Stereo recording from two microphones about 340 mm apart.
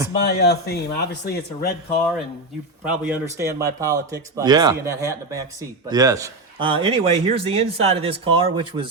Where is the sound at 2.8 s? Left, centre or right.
Centre.